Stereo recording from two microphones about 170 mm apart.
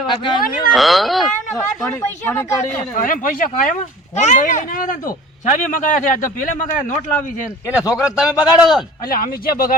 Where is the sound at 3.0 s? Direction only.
50° left (ahead or behind).